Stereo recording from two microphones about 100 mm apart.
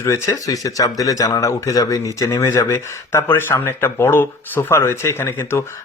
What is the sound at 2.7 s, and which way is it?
Speech, 25° left (ahead or behind).